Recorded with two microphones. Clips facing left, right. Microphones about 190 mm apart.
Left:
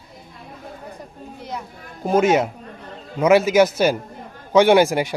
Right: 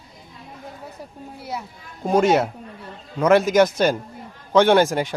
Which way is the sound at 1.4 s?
5° right (ahead or behind).